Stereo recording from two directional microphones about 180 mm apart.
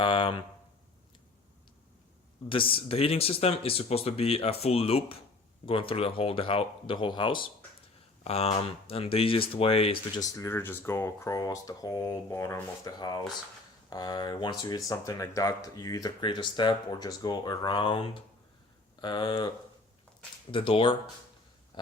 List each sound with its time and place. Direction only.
0.0 s speech: 30° left (ahead or behind)
2.5 s speech: 30° left (ahead or behind)
10.2 s speech: 15° left (ahead or behind)
20.5 s speech: 30° left (ahead or behind)